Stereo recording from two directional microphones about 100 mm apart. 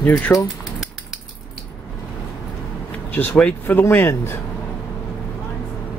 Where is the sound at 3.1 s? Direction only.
20° left (ahead or behind).